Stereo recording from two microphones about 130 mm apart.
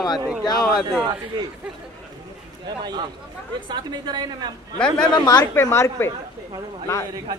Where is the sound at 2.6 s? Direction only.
35° right (ahead or behind).